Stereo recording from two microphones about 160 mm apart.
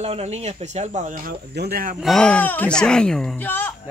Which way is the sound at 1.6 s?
70° right (ahead or behind).